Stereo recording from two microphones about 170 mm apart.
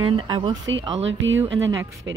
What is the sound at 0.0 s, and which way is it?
Speech, 30° right (ahead or behind).